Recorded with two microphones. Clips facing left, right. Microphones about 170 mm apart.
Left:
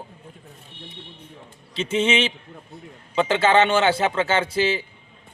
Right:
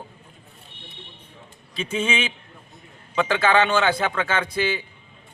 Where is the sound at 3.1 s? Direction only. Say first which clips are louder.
Left 2 dB; 25° left (ahead or behind).